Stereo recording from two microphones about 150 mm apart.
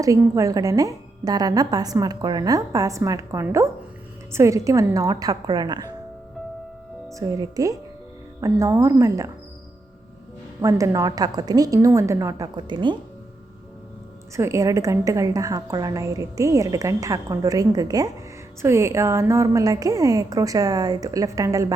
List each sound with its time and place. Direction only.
0.0 s a woman's voice: 20° right (ahead or behind)
7.1 s a woman's voice: 20° right (ahead or behind)
10.6 s a woman's voice: 20° right (ahead or behind)
14.3 s a woman's voice: 20° right (ahead or behind)